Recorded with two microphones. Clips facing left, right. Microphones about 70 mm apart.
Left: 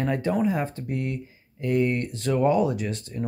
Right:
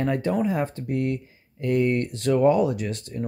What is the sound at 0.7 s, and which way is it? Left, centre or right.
Speech, right.